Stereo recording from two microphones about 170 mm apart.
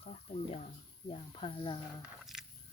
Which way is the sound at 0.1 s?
40° left (ahead or behind).